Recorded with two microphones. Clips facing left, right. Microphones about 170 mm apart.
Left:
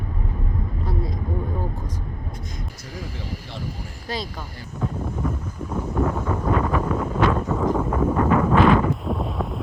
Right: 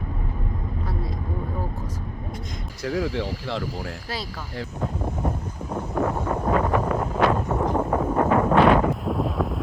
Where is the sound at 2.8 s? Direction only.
90° right.